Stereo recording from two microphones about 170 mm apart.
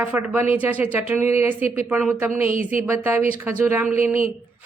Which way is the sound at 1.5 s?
40° left (ahead or behind).